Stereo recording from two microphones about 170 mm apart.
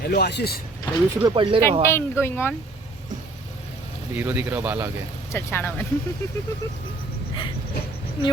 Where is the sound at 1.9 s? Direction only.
15° left (ahead or behind).